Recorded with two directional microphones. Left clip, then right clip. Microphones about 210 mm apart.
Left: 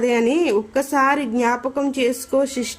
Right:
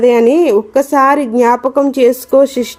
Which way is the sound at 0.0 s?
15° right (ahead or behind).